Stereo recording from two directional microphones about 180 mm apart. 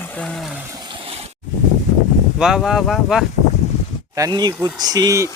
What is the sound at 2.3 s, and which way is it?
Speech, 5° right (ahead or behind).